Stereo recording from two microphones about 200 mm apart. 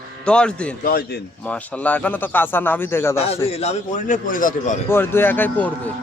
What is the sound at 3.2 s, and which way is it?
A man's voice, 30° left (ahead or behind).